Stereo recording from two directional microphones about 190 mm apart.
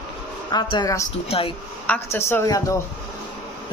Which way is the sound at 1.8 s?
10° left (ahead or behind).